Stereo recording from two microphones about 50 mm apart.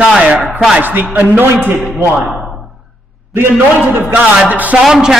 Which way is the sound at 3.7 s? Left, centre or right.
Right.